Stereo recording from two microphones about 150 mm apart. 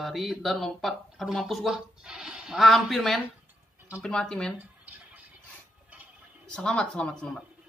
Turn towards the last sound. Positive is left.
turn(degrees=5)  # may be behind; listen again after turning